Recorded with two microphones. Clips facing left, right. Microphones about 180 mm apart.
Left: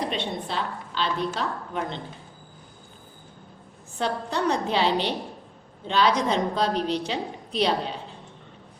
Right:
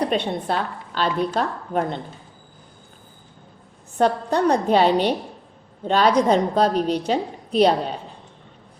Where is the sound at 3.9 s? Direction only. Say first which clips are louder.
Right 7 dB; 50° right (ahead or behind).